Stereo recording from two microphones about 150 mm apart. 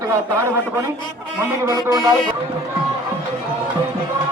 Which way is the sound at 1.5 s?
20° right (ahead or behind).